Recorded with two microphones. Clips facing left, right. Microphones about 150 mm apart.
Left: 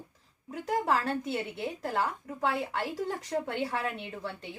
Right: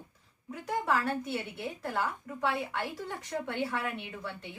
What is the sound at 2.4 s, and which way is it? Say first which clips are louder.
A woman's voice: left 2 dB; 30° left (ahead or behind).